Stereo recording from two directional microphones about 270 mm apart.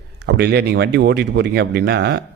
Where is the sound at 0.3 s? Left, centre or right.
Right.